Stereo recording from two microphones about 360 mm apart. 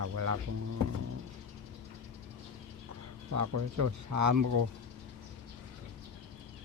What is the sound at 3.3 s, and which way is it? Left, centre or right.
Mantra, right.